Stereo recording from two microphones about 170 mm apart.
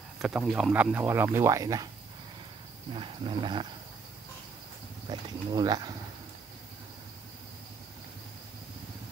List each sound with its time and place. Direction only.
0.2 s speech: 5° right (ahead or behind); by 1.9 s 20° right (ahead or behind)
2.9 s speech: 30° right (ahead or behind)
5.1 s speech: 25° right (ahead or behind)